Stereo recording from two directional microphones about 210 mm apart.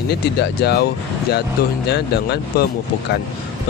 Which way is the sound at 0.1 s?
55° left (ahead or behind).